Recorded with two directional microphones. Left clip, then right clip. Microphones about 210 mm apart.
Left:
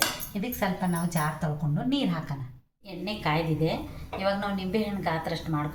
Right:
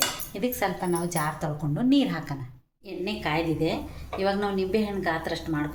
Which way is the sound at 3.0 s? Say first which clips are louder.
Right 1 dB; 35° right (ahead or behind).